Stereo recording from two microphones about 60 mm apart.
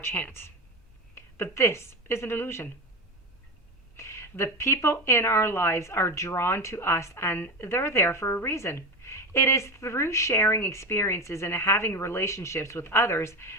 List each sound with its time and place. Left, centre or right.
0.0 s speech: left
1.1 s a woman's voice: left
3.9 s speech: left